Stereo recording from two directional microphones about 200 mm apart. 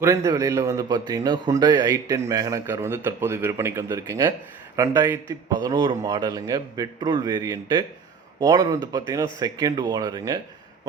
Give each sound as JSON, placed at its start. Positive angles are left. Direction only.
{"t": 0.0, "sound": "a man's voice", "side_deg": -15}